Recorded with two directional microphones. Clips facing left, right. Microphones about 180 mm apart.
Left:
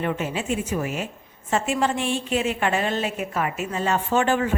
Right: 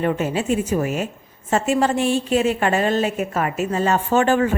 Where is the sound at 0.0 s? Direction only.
40° right (ahead or behind).